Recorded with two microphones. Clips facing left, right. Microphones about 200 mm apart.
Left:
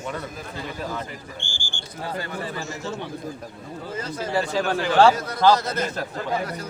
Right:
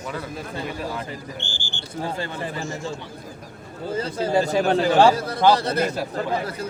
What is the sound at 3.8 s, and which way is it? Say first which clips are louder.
A man's voice: right 6 dB; 30° right (ahead or behind).